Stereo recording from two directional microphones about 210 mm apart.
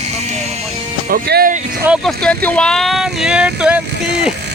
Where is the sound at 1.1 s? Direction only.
45° right (ahead or behind).